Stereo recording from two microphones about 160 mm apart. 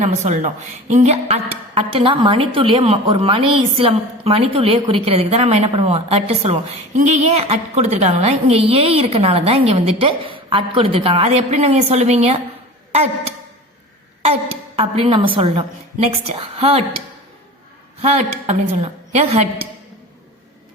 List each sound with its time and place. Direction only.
0.0 s a woman's voice: 45° right (ahead or behind)
14.8 s a woman's voice: 35° right (ahead or behind)
18.0 s a woman's voice: 40° right (ahead or behind)